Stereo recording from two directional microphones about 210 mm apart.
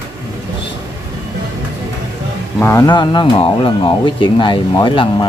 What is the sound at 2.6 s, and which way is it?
Speech, 15° left (ahead or behind).